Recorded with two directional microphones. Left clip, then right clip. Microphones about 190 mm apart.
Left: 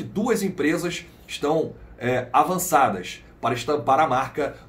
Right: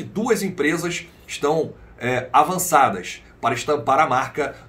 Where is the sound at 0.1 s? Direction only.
15° right (ahead or behind).